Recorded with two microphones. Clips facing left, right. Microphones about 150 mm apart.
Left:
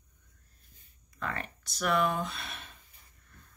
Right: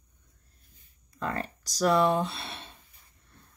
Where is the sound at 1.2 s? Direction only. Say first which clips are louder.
Right 5 dB; 35° right (ahead or behind).